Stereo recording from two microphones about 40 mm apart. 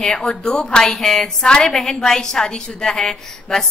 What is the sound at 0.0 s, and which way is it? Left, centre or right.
A woman's voice, centre.